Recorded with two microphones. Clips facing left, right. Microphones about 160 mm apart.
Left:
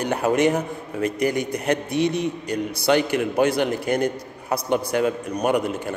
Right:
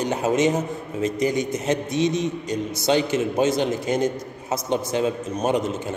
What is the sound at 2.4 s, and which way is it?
Speech, 60° left (ahead or behind).